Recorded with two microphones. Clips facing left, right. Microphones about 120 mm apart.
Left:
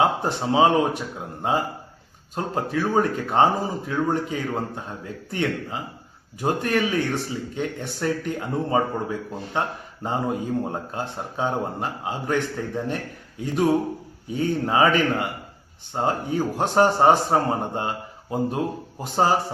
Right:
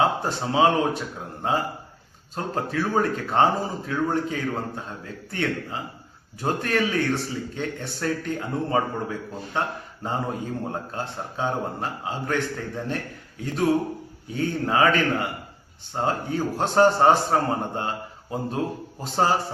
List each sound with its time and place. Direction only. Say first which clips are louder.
0.0 s speech: left 1 dB; 15° left (ahead or behind)
14.3 s speech: left 2 dB; 15° left (ahead or behind)